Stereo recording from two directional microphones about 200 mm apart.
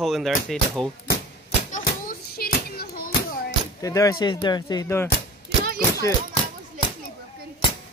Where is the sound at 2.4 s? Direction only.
50° left (ahead or behind).